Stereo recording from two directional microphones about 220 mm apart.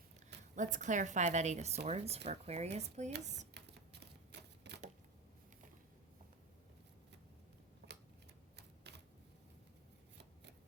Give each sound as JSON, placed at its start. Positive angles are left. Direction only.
{"t": 0.5, "sound": "a woman's voice", "side_deg": -35}
{"t": 4.0, "sound": "typewriter", "side_deg": -50}
{"t": 7.8, "sound": "a sound", "side_deg": -45}
{"t": 8.5, "sound": "typewriter", "side_deg": -50}